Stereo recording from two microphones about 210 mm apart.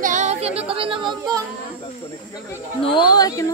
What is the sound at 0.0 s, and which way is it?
A capella, 35° right (ahead or behind).